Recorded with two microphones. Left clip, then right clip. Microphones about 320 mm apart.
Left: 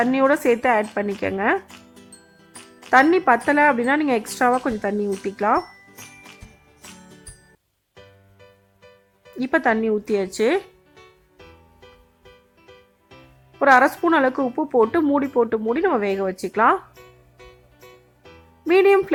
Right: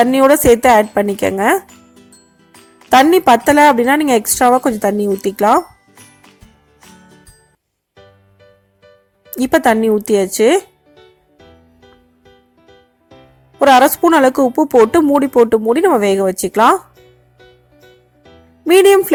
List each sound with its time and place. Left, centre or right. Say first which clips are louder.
0.0 s speech: right 8 dB; centre
1.9 s music: right 2 dB; centre
2.9 s speech: right 7 dB; centre
7.0 s music: right 2 dB; centre
9.4 s speech: right 8 dB; centre
13.6 s speech: right 6 dB; centre
18.6 s speech: right 7 dB; centre